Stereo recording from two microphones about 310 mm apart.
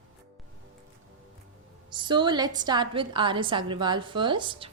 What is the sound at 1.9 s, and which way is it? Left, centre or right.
A woman's voice, centre.